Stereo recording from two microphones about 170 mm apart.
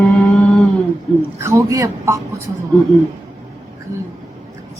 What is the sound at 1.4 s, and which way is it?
A woman's voice, 15° right (ahead or behind).